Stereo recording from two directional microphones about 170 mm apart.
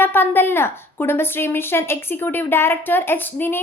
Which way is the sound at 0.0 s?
10° left (ahead or behind).